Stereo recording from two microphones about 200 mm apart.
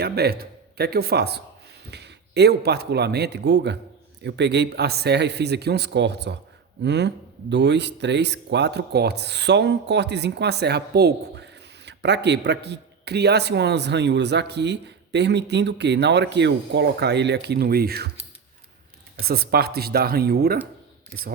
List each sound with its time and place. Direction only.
0.0 s speech: 50° right (ahead or behind)
19.2 s speech: 50° right (ahead or behind)